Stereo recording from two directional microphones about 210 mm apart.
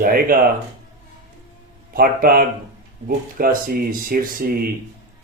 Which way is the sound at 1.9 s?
45° right (ahead or behind).